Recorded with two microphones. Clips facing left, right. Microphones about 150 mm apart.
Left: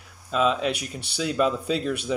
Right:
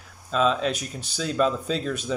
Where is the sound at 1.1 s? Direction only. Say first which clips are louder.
Even; 10° left (ahead or behind).